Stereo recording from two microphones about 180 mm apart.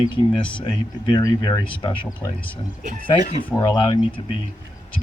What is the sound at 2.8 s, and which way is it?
Speech, 45° right (ahead or behind).